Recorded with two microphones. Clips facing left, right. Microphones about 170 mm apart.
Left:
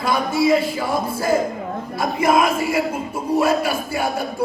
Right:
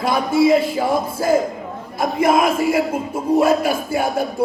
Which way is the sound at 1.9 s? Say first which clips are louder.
Right 2 dB; 50° right (ahead or behind).